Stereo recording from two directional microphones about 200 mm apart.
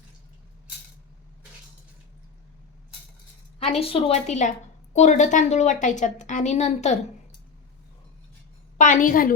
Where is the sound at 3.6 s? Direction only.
30° left (ahead or behind).